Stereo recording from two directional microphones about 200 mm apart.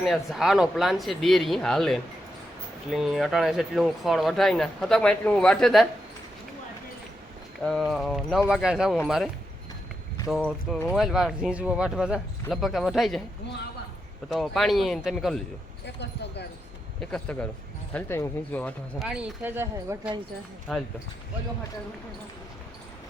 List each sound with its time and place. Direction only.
0.0 s speech: centre (ahead or behind)
7.6 s speech: centre (ahead or behind)
14.3 s speech: centre (ahead or behind)
16.0 s speech: 60° left (ahead or behind)
17.0 s speech: 5° left (ahead or behind)
19.0 s speech: 5° right (ahead or behind)
20.7 s speech: centre (ahead or behind)